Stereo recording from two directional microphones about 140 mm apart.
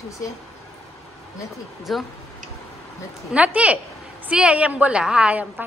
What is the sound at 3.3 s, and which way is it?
A woman's voice, 10° right (ahead or behind).